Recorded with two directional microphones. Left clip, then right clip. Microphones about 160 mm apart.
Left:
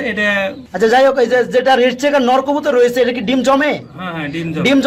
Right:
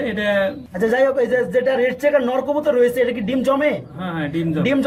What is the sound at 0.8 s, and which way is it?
A man's voice, 35° left (ahead or behind).